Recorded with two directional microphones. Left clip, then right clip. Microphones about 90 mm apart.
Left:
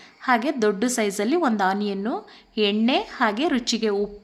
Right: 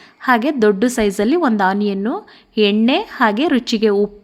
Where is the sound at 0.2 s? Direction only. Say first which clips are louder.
Right 6 dB; 45° right (ahead or behind).